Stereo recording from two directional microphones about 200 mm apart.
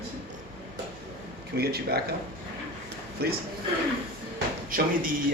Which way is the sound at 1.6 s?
50° right (ahead or behind).